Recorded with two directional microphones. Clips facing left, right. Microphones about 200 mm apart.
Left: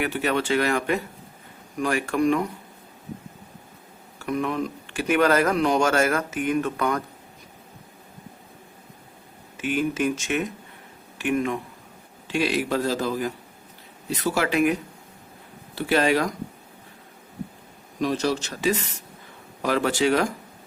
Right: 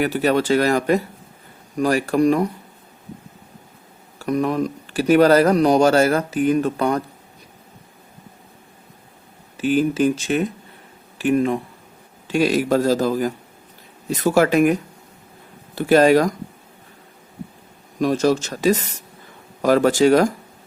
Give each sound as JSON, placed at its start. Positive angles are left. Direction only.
{"t": 0.0, "sound": "speech", "side_deg": -35}
{"t": 4.2, "sound": "speech", "side_deg": -40}
{"t": 9.6, "sound": "a man's voice", "side_deg": -35}
{"t": 18.0, "sound": "a man's voice", "side_deg": -45}